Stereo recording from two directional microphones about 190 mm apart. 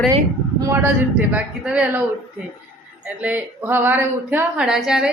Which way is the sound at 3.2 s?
10° right (ahead or behind).